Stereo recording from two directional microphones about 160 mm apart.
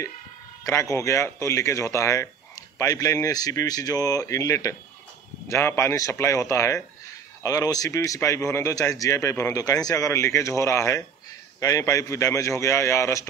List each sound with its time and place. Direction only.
0.7 s a man's voice: 15° left (ahead or behind)